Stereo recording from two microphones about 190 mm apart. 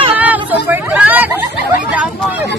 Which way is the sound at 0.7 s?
10° right (ahead or behind).